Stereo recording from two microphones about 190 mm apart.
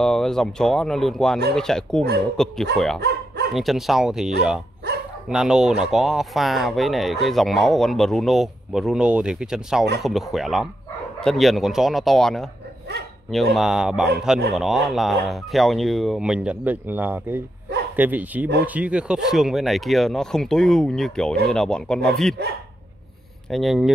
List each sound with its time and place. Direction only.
0.0 s speech: 5° left (ahead or behind)
3.0 s dog: 60° right (ahead or behind)
3.5 s speech: centre (ahead or behind)
23.5 s speech: centre (ahead or behind)